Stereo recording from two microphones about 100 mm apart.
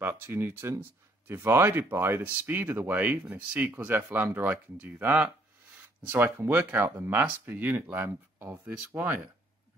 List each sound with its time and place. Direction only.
0.0 s speech: 25° right (ahead or behind)